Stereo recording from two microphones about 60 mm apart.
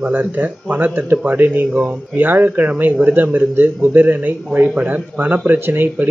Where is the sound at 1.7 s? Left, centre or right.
Centre.